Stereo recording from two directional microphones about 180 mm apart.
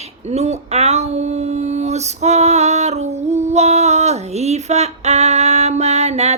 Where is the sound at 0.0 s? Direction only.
35° right (ahead or behind).